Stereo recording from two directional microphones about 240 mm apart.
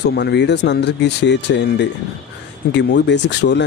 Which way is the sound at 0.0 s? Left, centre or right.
Left.